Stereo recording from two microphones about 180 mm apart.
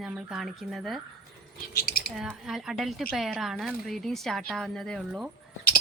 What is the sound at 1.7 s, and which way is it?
Speech, 55° left (ahead or behind).